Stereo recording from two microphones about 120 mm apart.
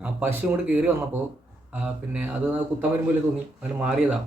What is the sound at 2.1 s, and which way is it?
Speech, 15° right (ahead or behind).